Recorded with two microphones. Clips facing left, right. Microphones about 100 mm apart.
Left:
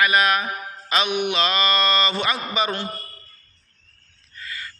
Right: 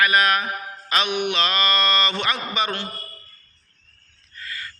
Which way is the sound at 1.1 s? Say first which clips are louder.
Left 1 dB; 30° right (ahead or behind).